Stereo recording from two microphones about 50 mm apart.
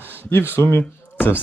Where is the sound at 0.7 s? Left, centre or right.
Left.